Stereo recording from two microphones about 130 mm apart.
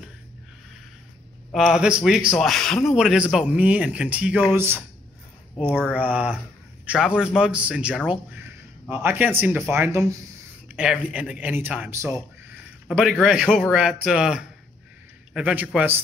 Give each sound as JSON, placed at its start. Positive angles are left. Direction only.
{"t": 1.5, "sound": "a man's voice", "side_deg": -5}
{"t": 5.9, "sound": "speech", "side_deg": -10}
{"t": 10.7, "sound": "speech", "side_deg": -5}
{"t": 12.8, "sound": "a man's voice", "side_deg": 0}